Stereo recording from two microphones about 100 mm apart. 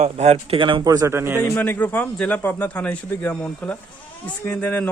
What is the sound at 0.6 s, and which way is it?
Speech, 55° right (ahead or behind).